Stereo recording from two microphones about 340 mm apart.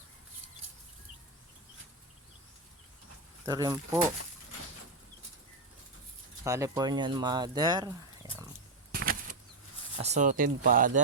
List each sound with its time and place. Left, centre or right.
3.4 s speech: centre
6.4 s speech: centre
8.9 s bird flight: right
10.0 s speech: right